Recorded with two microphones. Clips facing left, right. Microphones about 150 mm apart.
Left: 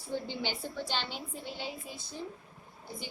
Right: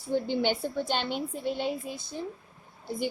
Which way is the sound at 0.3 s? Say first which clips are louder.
Right 9 dB; 55° right (ahead or behind).